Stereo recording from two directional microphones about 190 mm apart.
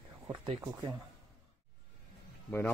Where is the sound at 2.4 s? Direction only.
10° left (ahead or behind).